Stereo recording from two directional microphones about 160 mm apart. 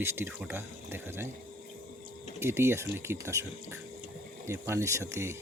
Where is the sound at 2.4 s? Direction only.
15° right (ahead or behind).